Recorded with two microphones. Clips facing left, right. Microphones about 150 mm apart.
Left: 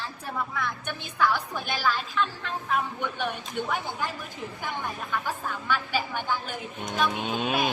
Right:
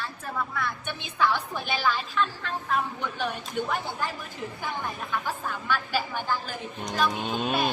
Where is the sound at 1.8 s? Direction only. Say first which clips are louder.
Even; 5° left (ahead or behind).